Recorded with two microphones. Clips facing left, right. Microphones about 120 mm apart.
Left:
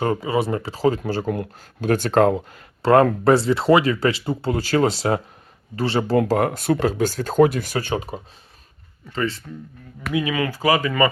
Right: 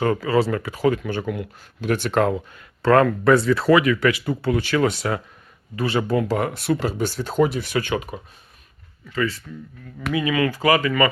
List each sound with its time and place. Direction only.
0.0 s speech: 25° left (ahead or behind)
6.1 s speech: 45° left (ahead or behind); by 9.4 s 25° left (ahead or behind)
10.0 s speech: centre (ahead or behind)
10.3 s speech: 15° left (ahead or behind)